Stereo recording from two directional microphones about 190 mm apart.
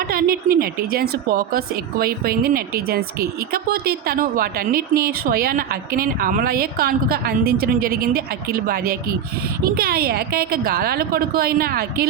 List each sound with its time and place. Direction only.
0.0 s a woman's voice: 50° right (ahead or behind)